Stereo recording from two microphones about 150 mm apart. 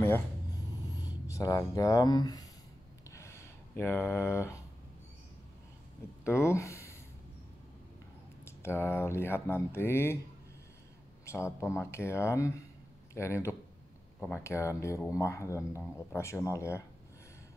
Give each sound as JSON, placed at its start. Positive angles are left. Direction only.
{"t": 0.9, "sound": "speech", "side_deg": 25}
{"t": 3.1, "sound": "a sound", "side_deg": 20}
{"t": 6.2, "sound": "speech", "side_deg": 15}
{"t": 8.5, "sound": "speech", "side_deg": 15}
{"t": 11.2, "sound": "speech", "side_deg": 15}